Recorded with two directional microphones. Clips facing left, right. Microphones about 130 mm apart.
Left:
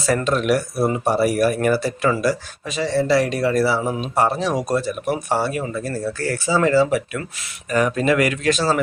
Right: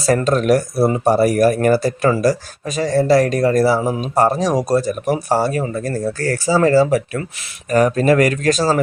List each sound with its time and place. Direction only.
0.0 s speech: 40° right (ahead or behind)